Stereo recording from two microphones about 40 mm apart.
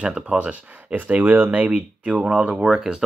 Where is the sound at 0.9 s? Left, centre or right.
Right.